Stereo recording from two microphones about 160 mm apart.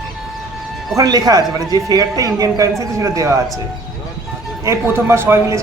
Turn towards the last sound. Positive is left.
turn(degrees=-15)  # may be behind; listen again after turning